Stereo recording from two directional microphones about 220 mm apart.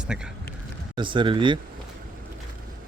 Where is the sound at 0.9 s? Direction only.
20° right (ahead or behind).